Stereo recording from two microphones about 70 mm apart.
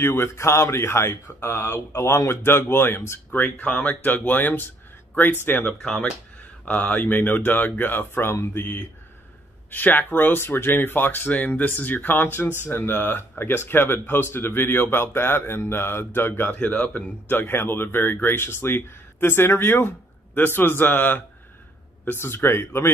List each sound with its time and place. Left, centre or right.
0.0 s speech: left
5.7 s speech: centre; by 16.4 s left
16.4 s speech: left